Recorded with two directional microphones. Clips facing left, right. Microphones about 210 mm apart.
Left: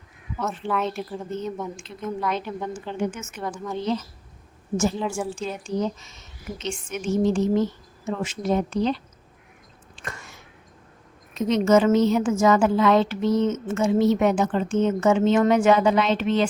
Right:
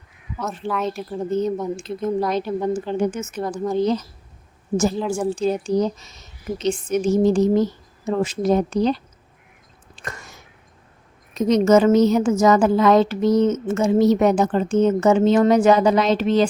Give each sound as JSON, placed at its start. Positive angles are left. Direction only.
{"t": 0.6, "sound": "a woman's voice", "side_deg": 0}
{"t": 1.2, "sound": "a woman's voice", "side_deg": -40}
{"t": 5.2, "sound": "a woman's voice", "side_deg": -40}
{"t": 9.9, "sound": "a sound", "side_deg": -40}
{"t": 11.3, "sound": "a woman's voice", "side_deg": -40}